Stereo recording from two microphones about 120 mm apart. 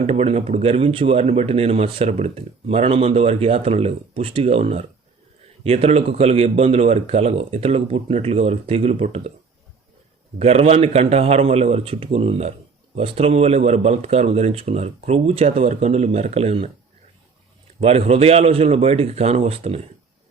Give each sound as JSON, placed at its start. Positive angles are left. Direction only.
{"t": 0.0, "sound": "speech", "side_deg": -60}
{"t": 10.3, "sound": "speech", "side_deg": -60}
{"t": 17.7, "sound": "speech", "side_deg": -55}